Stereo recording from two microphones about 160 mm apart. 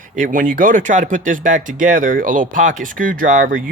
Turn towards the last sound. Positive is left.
turn(degrees=-55)  # may be behind; listen again after turning